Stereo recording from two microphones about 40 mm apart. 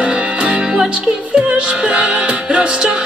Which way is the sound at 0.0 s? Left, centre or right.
Right.